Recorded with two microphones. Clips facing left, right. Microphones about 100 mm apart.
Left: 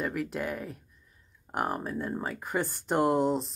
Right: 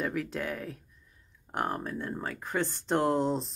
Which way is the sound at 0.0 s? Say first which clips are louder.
Left 1 dB; 5° left (ahead or behind).